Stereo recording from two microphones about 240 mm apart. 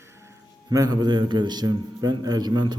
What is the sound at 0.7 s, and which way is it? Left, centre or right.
A man's voice, centre.